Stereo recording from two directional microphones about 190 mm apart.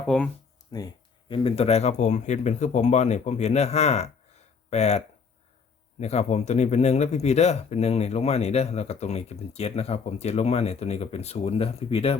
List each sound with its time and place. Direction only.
0.7 s speech: 20° left (ahead or behind)
1.3 s speech: 30° left (ahead or behind)